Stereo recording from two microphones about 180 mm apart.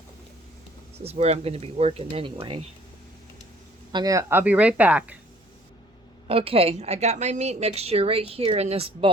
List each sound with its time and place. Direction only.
0.9 s a woman's voice: 35° right (ahead or behind)
3.9 s speech: 20° right (ahead or behind)
6.2 s a woman's voice: 30° right (ahead or behind)